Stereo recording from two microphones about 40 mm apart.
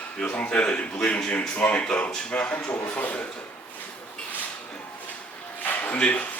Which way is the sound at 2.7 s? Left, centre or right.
Left.